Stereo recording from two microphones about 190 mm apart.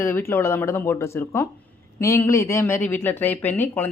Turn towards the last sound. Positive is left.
turn(degrees=10)  # may be behind; listen again after turning